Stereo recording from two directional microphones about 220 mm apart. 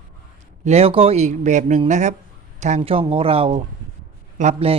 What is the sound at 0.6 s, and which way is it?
A man's voice, 30° right (ahead or behind).